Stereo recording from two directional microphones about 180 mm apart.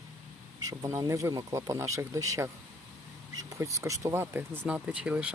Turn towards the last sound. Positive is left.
turn(degrees=-5)  # may be behind; listen again after turning